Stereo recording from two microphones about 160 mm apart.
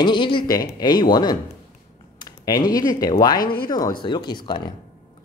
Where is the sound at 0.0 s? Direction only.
30° left (ahead or behind).